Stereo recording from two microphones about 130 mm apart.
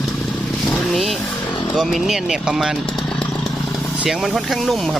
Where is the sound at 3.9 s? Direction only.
5° right (ahead or behind).